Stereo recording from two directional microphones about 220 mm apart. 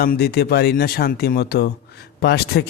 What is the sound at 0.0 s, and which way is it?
A man's voice, 45° left (ahead or behind).